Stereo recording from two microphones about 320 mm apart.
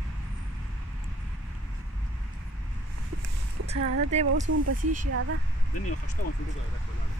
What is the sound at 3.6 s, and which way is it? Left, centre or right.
Speech, centre.